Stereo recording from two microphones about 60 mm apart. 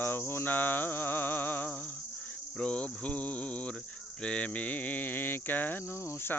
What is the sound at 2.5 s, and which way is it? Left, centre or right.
Cricket, centre.